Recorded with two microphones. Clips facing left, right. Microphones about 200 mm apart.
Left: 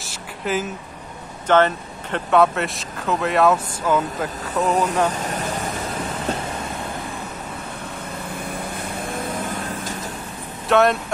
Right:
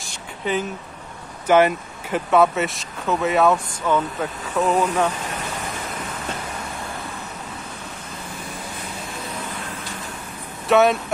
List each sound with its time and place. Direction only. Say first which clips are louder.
0.0 s a sound: even; 5° left (ahead or behind)
1.5 s speech: right 1 dB; 10° right (ahead or behind)
10.7 s speech: right 1 dB; centre (ahead or behind)